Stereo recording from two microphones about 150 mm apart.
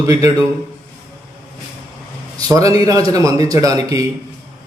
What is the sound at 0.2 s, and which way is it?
Speech, 25° right (ahead or behind).